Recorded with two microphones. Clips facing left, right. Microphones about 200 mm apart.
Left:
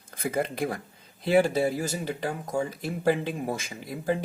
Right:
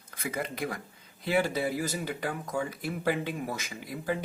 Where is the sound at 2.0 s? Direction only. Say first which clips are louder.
Left 3 dB; 25° left (ahead or behind).